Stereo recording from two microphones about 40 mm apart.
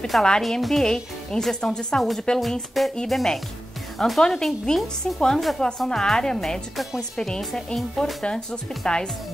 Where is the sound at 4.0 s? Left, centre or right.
Left.